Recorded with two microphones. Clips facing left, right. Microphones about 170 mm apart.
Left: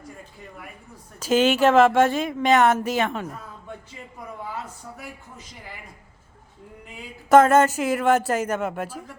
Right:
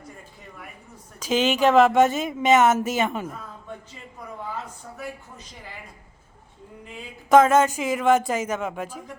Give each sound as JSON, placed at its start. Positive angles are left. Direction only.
{"t": 1.2, "sound": "a woman's voice", "side_deg": 5}
{"t": 6.9, "sound": "a woman's voice", "side_deg": 5}